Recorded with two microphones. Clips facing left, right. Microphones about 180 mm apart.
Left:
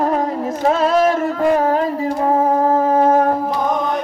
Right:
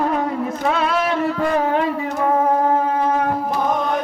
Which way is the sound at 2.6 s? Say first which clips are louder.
Left 4 dB; 40° left (ahead or behind).